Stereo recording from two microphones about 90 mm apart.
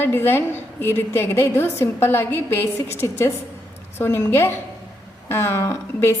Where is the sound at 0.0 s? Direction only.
25° left (ahead or behind).